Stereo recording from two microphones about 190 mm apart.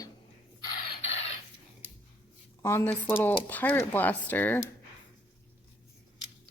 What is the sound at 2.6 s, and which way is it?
Speech, 15° left (ahead or behind).